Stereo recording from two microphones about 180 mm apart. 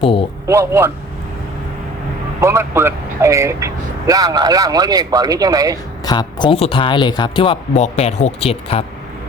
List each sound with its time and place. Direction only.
0.0 s speech: 30° left (ahead or behind)
0.4 s a man's voice: 15° right (ahead or behind)
2.4 s speech: 15° right (ahead or behind)
5.7 s speech: 25° left (ahead or behind)